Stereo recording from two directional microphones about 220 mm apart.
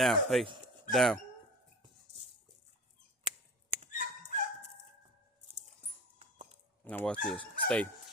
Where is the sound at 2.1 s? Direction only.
30° right (ahead or behind).